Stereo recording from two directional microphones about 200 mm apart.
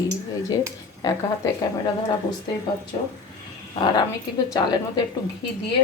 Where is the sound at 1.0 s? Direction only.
20° left (ahead or behind).